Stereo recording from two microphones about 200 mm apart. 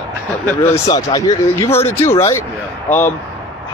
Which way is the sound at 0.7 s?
20° left (ahead or behind).